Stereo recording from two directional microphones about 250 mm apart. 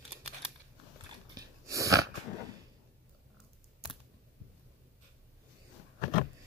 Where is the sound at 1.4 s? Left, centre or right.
Centre.